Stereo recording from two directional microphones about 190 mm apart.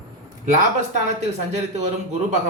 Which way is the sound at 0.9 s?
35° right (ahead or behind).